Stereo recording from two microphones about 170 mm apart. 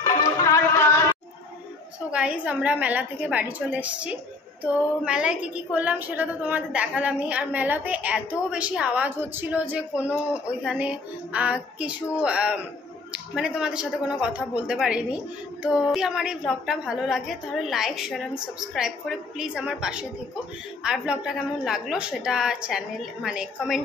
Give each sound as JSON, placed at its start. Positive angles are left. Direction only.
{"t": 0.0, "sound": "music", "side_deg": 20}
{"t": 2.0, "sound": "a woman's voice", "side_deg": -5}